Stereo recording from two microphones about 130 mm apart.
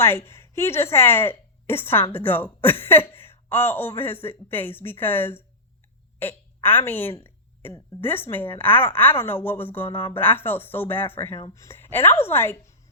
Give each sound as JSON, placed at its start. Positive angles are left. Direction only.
{"t": 0.0, "sound": "a woman's voice", "side_deg": 20}